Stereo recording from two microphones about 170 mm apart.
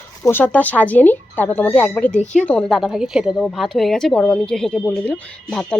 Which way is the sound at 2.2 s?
45° left (ahead or behind).